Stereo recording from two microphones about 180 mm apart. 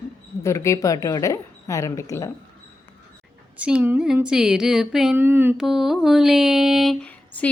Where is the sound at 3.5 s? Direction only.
5° right (ahead or behind).